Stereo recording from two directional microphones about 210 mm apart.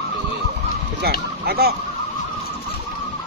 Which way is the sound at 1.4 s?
50° right (ahead or behind).